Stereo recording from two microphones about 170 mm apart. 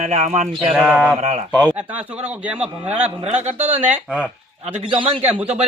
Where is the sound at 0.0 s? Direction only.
45° right (ahead or behind).